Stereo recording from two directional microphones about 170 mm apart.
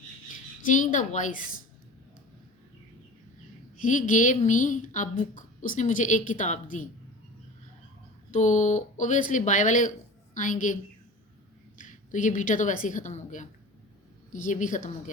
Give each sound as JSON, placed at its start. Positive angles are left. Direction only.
{"t": 0.6, "sound": "speech", "side_deg": 50}
{"t": 3.8, "sound": "speech", "side_deg": 50}
{"t": 8.3, "sound": "speech", "side_deg": 45}
{"t": 11.8, "sound": "a woman's voice", "side_deg": 50}